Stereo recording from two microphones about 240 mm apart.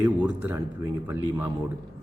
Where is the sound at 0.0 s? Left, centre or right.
Centre.